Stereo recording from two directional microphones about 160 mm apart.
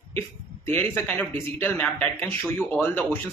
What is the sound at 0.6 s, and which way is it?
Speech, 15° left (ahead or behind).